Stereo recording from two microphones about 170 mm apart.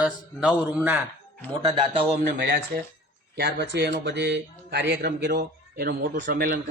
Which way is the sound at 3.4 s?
75° right (ahead or behind).